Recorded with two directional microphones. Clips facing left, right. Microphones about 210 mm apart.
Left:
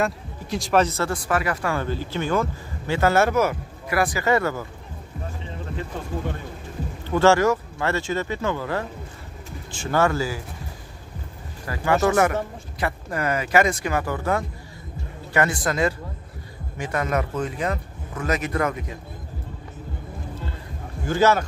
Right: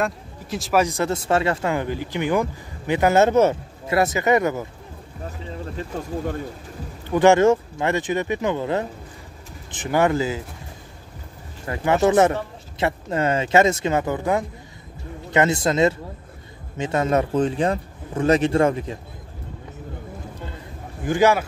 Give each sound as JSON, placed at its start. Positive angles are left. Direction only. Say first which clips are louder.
{"t": 0.0, "sound": "speech", "louder": "even", "side_deg": 0}
{"t": 0.8, "sound": "speech", "louder": "right 3 dB", "side_deg": -20}
{"t": 7.1, "sound": "speech", "louder": "right 3 dB", "side_deg": -15}
{"t": 11.6, "sound": "speech", "louder": "right 2 dB", "side_deg": -20}
{"t": 21.0, "sound": "speech", "louder": "right 1 dB", "side_deg": -15}